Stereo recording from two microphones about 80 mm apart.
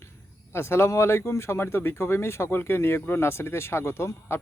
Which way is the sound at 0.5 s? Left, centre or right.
Left.